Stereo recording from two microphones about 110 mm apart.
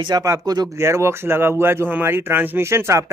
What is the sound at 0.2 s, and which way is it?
Speech, 35° right (ahead or behind).